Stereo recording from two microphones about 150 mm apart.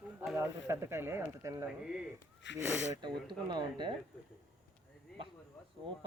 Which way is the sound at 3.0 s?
30° right (ahead or behind).